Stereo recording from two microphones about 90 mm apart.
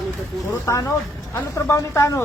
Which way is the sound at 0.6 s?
40° left (ahead or behind).